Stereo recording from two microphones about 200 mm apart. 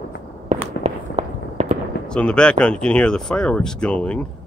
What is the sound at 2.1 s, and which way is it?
Speech, 5° left (ahead or behind).